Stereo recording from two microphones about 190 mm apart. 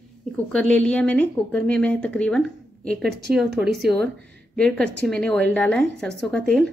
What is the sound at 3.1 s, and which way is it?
Speech, 60° right (ahead or behind).